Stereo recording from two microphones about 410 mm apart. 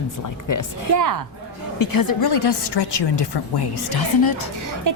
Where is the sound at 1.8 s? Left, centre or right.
Left.